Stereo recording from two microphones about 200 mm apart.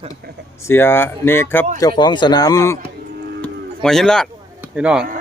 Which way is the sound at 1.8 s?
20° left (ahead or behind).